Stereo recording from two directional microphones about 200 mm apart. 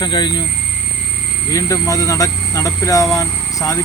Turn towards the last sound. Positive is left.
turn(degrees=15)  # may be behind; listen again after turning